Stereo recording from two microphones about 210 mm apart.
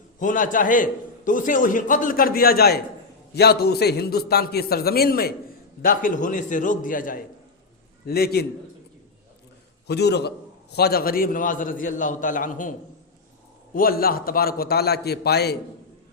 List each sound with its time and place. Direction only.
0.2 s a man's voice: 40° left (ahead or behind)
9.8 s a man's voice: 50° left (ahead or behind)
13.7 s a man's voice: 45° left (ahead or behind)